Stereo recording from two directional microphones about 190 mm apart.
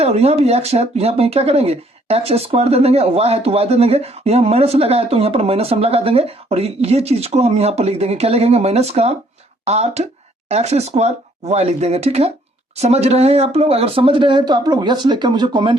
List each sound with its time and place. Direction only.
0.0 s speech: 35° right (ahead or behind)